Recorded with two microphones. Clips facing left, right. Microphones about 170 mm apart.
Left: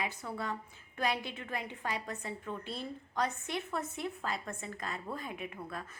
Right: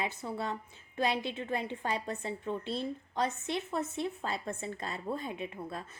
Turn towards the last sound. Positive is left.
turn(degrees=-25)  # may be behind; listen again after turning